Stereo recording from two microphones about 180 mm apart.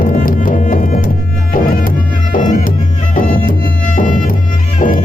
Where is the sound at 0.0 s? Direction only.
50° left (ahead or behind).